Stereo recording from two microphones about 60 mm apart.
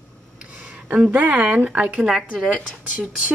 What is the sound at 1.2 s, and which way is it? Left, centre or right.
Speech, right.